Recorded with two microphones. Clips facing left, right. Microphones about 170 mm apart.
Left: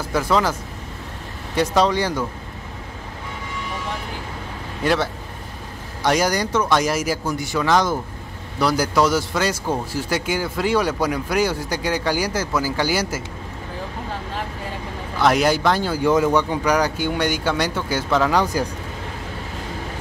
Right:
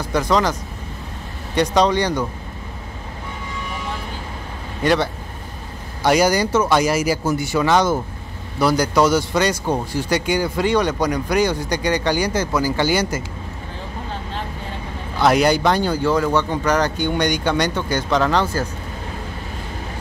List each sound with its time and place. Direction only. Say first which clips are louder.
0.0 s speech: right 1 dB; 5° left (ahead or behind)
4.8 s speech: right 2 dB; centre (ahead or behind)
15.1 s speech: right 2 dB; centre (ahead or behind)
16.0 s speech: left 1 dB; 20° left (ahead or behind)